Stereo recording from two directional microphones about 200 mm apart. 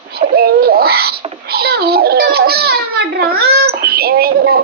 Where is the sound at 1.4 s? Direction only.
50° right (ahead or behind).